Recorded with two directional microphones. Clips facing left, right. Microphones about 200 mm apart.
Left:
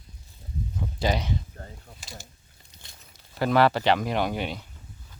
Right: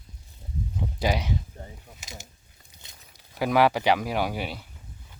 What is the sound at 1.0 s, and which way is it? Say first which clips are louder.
Speech: even; 10° right (ahead or behind).